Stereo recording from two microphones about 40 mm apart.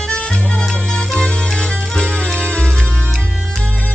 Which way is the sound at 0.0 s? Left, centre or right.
Left.